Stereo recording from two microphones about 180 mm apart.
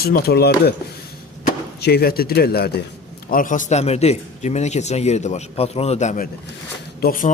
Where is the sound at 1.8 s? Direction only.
60° left (ahead or behind).